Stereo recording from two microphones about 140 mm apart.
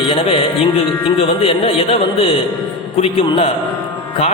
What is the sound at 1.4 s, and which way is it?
A man's voice, 45° left (ahead or behind).